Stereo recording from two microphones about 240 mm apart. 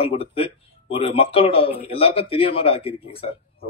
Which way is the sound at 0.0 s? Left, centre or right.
Left.